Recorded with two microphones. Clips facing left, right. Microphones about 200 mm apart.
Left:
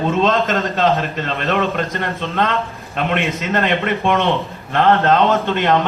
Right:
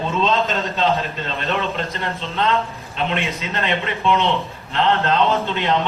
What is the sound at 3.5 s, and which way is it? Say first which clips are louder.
A man's voice: left 5 dB; 55° left (ahead or behind).